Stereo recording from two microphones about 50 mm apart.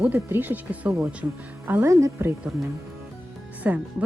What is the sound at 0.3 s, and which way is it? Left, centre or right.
Speech, right.